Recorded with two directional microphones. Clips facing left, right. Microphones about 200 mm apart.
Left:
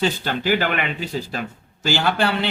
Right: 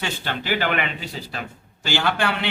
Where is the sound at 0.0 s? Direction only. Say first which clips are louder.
Left 7 dB; 40° left (ahead or behind).